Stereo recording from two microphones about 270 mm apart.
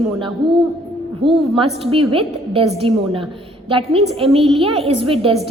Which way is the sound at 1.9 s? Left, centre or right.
Right.